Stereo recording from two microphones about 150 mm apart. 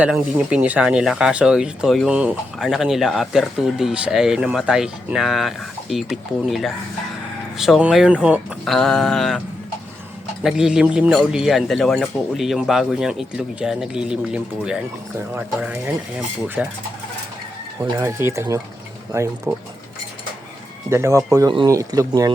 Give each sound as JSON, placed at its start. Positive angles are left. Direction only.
{"t": 0.0, "sound": "speech", "side_deg": -10}
{"t": 10.4, "sound": "speech", "side_deg": -5}
{"t": 17.8, "sound": "speech", "side_deg": -20}
{"t": 20.9, "sound": "speech", "side_deg": -20}